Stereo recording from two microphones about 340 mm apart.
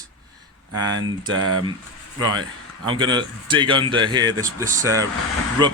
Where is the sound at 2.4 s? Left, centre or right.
Centre.